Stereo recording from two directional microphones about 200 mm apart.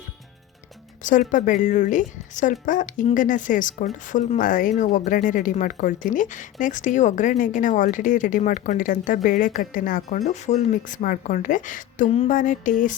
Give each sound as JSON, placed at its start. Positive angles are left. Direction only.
{"t": 1.3, "sound": "speech", "side_deg": 40}